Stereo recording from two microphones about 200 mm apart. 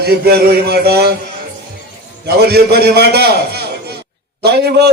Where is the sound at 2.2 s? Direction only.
50° right (ahead or behind).